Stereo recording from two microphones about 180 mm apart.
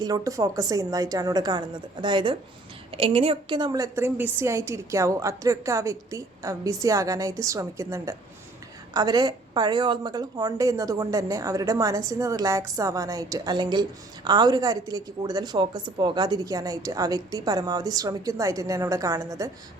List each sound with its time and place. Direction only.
0.0 s a woman's voice: 20° right (ahead or behind)